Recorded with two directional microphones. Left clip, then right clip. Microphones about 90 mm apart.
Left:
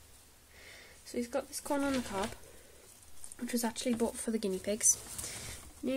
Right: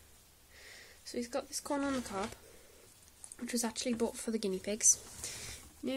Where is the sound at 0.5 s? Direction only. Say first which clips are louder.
Even; 20° right (ahead or behind).